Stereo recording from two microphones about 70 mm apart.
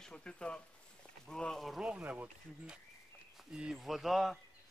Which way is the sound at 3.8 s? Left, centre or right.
Centre.